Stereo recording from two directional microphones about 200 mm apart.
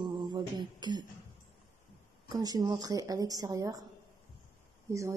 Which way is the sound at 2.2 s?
20° right (ahead or behind).